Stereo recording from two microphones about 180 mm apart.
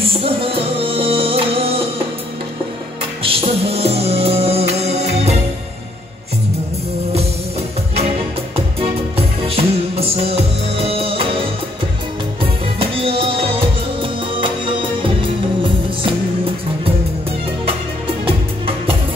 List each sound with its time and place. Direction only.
0.0 s music: 30° right (ahead or behind)
3.2 s music: 35° right (ahead or behind)
8.7 s music: 30° right (ahead or behind)
12.7 s music: 30° right (ahead or behind)
15.0 s music: 30° right (ahead or behind)